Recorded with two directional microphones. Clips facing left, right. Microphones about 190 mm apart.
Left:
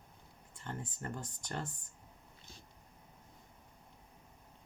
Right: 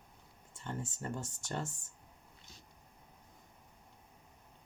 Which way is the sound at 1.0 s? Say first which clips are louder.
Right 2 dB; 25° right (ahead or behind).